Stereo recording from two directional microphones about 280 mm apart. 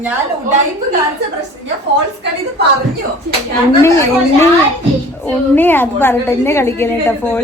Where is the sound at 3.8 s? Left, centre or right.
Centre.